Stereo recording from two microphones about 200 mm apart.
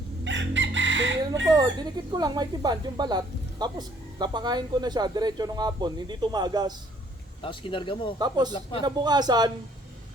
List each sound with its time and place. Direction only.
0.3 s chicken: 65° right (ahead or behind)
1.5 s speech: 20° right (ahead or behind)
7.4 s speech: 25° left (ahead or behind)
8.2 s speech: 20° right (ahead or behind)